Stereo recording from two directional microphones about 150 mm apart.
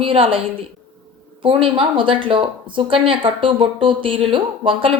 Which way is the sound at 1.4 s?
35° right (ahead or behind).